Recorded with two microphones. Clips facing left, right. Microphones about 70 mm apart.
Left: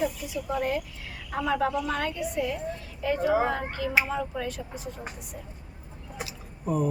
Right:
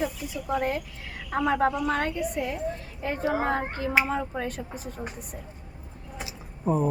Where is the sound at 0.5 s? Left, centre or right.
Right.